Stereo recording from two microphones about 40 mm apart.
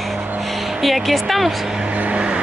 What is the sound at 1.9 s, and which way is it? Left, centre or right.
Vehicle, right.